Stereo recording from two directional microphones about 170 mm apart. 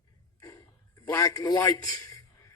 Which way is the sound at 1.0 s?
20° left (ahead or behind).